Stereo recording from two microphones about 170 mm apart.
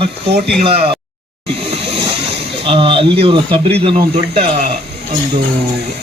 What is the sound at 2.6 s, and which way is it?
Speech, 30° right (ahead or behind).